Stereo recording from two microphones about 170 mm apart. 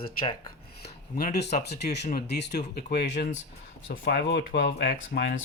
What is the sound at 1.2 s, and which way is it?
Speech, 70° left (ahead or behind).